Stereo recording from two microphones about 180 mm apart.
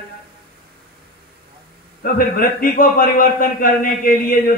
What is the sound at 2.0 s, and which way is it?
A man's voice, 55° left (ahead or behind).